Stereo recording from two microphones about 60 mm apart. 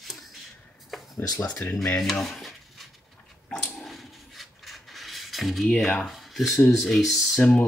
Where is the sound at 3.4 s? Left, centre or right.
Centre.